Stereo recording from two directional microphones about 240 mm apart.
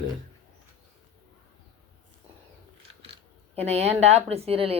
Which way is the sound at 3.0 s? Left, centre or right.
Right.